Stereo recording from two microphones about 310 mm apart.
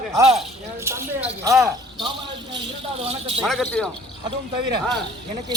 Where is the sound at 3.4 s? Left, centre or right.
Centre.